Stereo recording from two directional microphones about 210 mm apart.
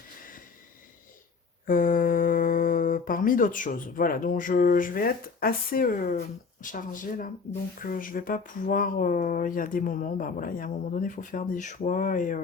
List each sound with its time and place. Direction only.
1.6 s speech: 40° left (ahead or behind)